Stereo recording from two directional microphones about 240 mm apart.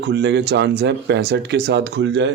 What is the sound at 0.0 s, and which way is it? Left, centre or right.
A man's voice, right.